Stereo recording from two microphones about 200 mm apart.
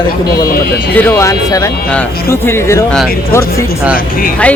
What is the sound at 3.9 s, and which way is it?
Speech, 45° left (ahead or behind).